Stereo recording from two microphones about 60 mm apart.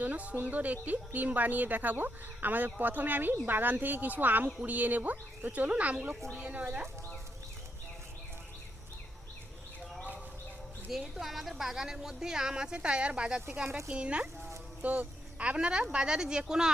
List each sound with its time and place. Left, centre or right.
0.0 s a woman's voice: right
10.9 s a woman's voice: centre